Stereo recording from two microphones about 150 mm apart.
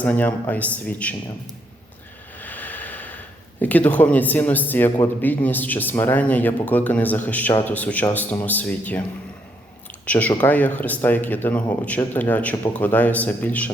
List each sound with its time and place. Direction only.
0.0 s a man's voice: 10° left (ahead or behind)
2.4 s a sound: 10° left (ahead or behind)
3.6 s a man's voice: 10° left (ahead or behind)
10.1 s a man's voice: 10° left (ahead or behind)